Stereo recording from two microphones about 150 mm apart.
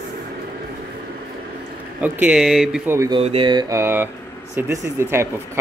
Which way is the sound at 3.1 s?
35° right (ahead or behind).